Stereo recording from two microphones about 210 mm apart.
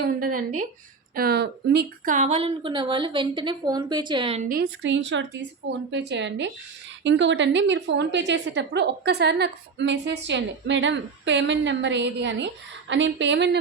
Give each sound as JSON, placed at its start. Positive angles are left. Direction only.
{"t": 0.0, "sound": "a woman's voice", "side_deg": -40}
{"t": 2.1, "sound": "a woman's voice", "side_deg": -30}
{"t": 4.4, "sound": "a woman's voice", "side_deg": -45}
{"t": 4.8, "sound": "a woman's voice", "side_deg": -60}